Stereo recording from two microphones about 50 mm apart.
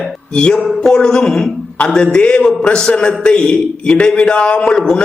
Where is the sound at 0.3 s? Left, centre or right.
Centre.